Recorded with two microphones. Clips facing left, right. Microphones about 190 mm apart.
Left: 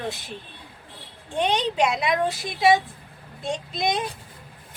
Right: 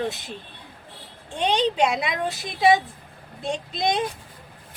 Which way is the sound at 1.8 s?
25° right (ahead or behind).